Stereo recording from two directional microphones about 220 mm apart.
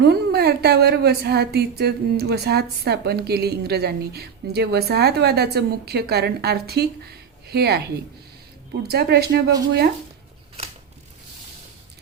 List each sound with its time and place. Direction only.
0.0 s a woman's voice: 50° right (ahead or behind)